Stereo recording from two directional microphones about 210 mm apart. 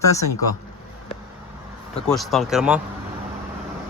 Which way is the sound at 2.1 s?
Centre (ahead or behind).